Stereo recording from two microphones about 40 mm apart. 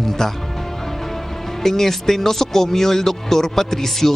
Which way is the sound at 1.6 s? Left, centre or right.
Centre.